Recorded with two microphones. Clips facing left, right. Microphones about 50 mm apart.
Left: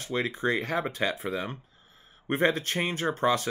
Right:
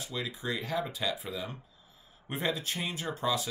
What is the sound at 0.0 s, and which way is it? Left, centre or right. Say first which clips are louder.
Speech: left 8 dB; left.